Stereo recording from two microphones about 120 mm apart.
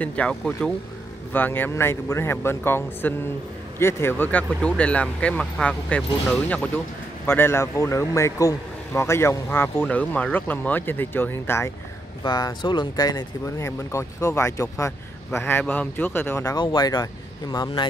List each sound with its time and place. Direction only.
0.0 s speech: 10° left (ahead or behind)
7.2 s speech: 20° left (ahead or behind)
12.2 s speech: 35° left (ahead or behind)
16.5 s speech: 35° left (ahead or behind)